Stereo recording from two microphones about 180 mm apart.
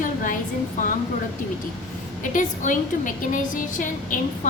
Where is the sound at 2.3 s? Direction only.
45° left (ahead or behind).